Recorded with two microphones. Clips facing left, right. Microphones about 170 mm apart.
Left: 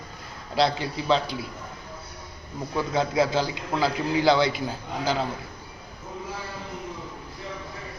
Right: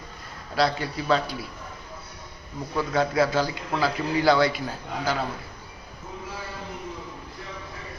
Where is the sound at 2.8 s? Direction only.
20° left (ahead or behind).